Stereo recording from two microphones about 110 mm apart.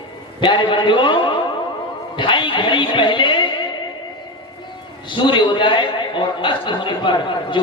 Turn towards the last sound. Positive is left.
turn(degrees=45)  # may be behind; listen again after turning